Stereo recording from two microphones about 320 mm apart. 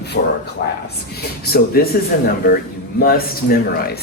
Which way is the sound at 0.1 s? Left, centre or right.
Left.